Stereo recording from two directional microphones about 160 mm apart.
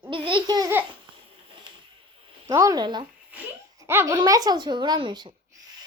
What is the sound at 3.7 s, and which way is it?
Speech, 15° right (ahead or behind).